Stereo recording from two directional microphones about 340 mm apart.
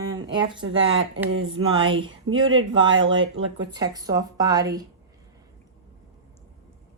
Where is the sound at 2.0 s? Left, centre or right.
Right.